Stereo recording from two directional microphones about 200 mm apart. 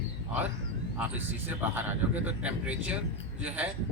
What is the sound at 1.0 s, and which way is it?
A man's voice, 10° right (ahead or behind).